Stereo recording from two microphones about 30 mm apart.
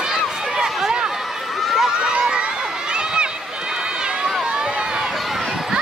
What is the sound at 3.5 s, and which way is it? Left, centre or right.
Run, right.